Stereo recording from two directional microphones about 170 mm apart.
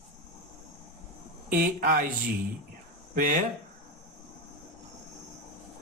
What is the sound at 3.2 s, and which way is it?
Speech, 50° right (ahead or behind).